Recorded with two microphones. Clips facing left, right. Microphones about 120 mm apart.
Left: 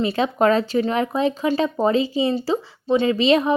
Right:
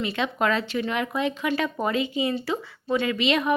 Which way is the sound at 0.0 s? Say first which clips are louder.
Left 7 dB; 35° left (ahead or behind).